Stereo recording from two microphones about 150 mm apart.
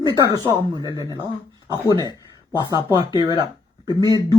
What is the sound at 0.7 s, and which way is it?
Speech, 25° right (ahead or behind).